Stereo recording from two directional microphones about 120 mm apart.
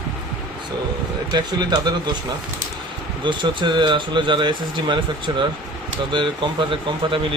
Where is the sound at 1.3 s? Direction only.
35° right (ahead or behind).